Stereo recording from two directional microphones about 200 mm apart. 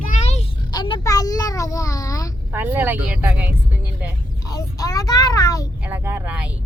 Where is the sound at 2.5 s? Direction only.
10° right (ahead or behind).